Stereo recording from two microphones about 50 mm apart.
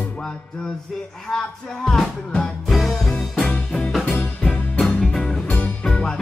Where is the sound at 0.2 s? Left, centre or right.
Centre.